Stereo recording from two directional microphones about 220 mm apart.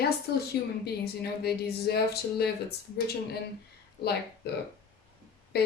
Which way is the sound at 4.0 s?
50° left (ahead or behind).